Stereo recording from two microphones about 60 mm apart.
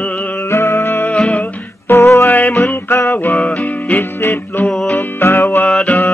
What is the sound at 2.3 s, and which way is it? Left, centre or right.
Music, left.